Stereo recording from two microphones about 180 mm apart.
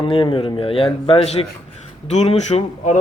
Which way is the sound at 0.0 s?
30° left (ahead or behind).